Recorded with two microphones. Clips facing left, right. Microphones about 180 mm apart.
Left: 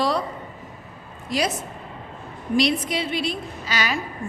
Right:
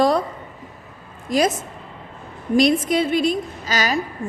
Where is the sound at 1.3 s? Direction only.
45° right (ahead or behind).